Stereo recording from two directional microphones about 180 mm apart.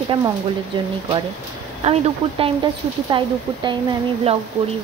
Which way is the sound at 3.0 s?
25° right (ahead or behind).